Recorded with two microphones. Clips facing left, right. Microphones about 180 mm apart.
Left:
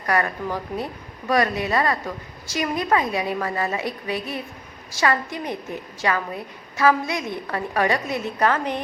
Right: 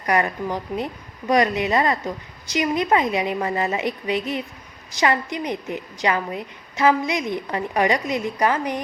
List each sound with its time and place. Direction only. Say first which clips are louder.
0.0 s a woman's voice: right 2 dB; 20° right (ahead or behind)